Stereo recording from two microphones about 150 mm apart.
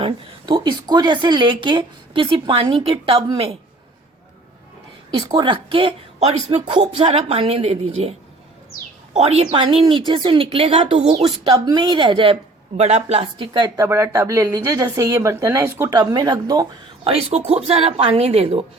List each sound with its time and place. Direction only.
0.0 s speech: 30° right (ahead or behind)
5.1 s a woman's voice: 30° right (ahead or behind)
9.1 s speech: 45° right (ahead or behind)
12.7 s speech: 50° right (ahead or behind); by 16.6 s 25° right (ahead or behind)
17.0 s speech: 40° right (ahead or behind)